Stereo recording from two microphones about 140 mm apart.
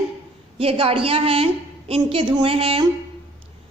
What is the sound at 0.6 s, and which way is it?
A woman's voice, 45° right (ahead or behind).